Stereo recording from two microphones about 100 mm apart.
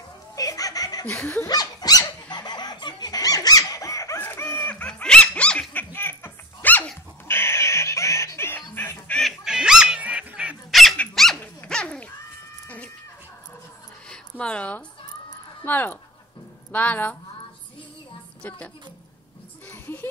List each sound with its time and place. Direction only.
0.4 s baby laughter: 35° left (ahead or behind)
1.0 s snicker: 15° left (ahead or behind)
1.5 s squeak: 40° left (ahead or behind)
4.2 s dog: 20° left (ahead or behind)
7.2 s music: 25° left (ahead or behind)
9.2 s goose: centre (ahead or behind)
10.7 s dog: centre (ahead or behind)
11.3 s dog: 15° left (ahead or behind)
12.6 s a sound: 15° left (ahead or behind)
14.0 s a sound: 10° left (ahead or behind)
15.6 s speech: 20° left (ahead or behind)
16.7 s snicker: 15° left (ahead or behind)
18.4 s snicker: 20° left (ahead or behind)
19.7 s music: 20° left (ahead or behind)